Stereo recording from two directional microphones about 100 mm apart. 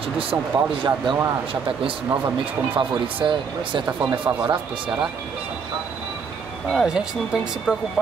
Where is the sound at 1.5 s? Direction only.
60° right (ahead or behind).